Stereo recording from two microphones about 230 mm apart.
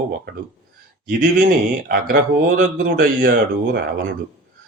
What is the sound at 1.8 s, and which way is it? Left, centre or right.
Speech, right.